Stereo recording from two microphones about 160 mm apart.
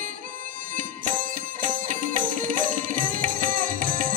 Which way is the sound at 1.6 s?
55° right (ahead or behind).